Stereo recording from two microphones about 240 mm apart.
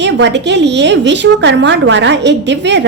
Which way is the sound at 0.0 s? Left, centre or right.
Right.